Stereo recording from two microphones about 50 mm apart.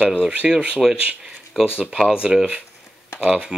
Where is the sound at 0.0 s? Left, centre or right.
Right.